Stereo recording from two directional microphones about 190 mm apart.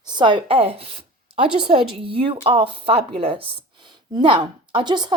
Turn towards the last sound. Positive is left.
turn(degrees=-25)  # may be behind; listen again after turning